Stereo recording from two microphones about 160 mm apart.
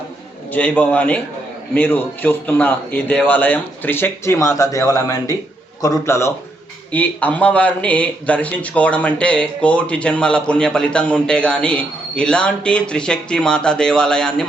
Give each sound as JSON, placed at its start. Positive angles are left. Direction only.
{"t": 0.5, "sound": "speech", "side_deg": 10}